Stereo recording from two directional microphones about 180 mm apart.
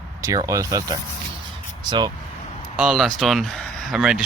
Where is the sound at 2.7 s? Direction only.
5° right (ahead or behind).